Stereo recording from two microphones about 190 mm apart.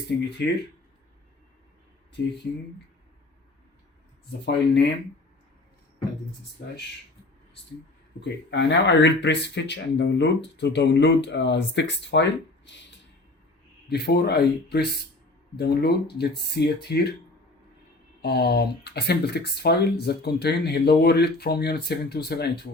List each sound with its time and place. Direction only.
4.3 s speech: 60° left (ahead or behind)
8.2 s speech: 65° left (ahead or behind)
13.8 s speech: 60° left (ahead or behind)
18.2 s speech: 60° left (ahead or behind)